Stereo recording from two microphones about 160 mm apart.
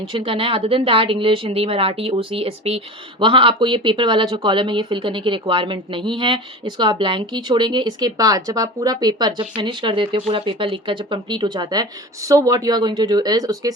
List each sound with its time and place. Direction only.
0.1 s speech: 30° right (ahead or behind)